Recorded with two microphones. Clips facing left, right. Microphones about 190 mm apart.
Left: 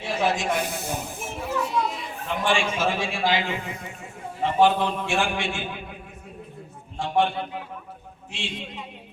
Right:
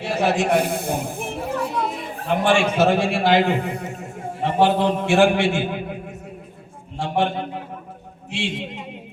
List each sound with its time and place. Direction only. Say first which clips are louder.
0.0 s a child's voice: right 4 dB; 65° right (ahead or behind)
3.8 s a man's voice: right 6 dB; 45° right (ahead or behind)
5.0 s a man's voice: right 9 dB; 60° right (ahead or behind)
7.3 s a man's voice: right 4 dB; 45° right (ahead or behind)
8.3 s a man's voice: right 8 dB; 60° right (ahead or behind)